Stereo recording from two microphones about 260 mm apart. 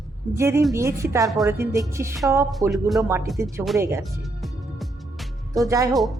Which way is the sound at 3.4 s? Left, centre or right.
Centre.